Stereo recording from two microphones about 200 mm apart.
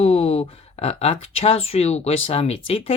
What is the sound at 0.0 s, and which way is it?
Speech, 30° left (ahead or behind).